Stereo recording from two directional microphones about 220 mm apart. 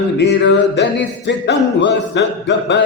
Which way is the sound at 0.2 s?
50° left (ahead or behind).